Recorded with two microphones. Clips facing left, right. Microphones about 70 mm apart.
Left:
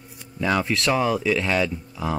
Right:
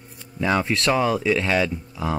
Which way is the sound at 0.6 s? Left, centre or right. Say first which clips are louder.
Right 1 dB; centre.